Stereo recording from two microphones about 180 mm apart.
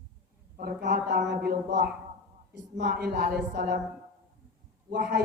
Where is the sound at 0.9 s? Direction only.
50° right (ahead or behind).